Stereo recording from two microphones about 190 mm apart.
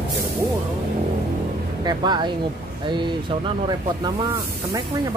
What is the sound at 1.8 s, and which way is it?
Speech, 25° right (ahead or behind).